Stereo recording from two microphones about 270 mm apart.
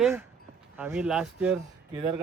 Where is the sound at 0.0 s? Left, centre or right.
Centre.